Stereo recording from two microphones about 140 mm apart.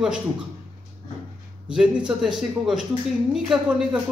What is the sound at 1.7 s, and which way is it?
A man's voice, 5° right (ahead or behind).